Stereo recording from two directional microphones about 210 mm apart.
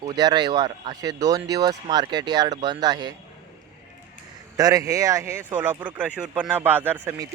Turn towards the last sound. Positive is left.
turn(degrees=-10)  # may be behind; listen again after turning